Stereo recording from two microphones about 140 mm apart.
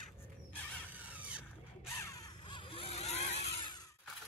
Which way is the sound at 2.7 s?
45° left (ahead or behind).